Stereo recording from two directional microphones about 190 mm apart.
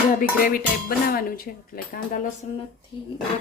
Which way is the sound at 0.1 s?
45° left (ahead or behind).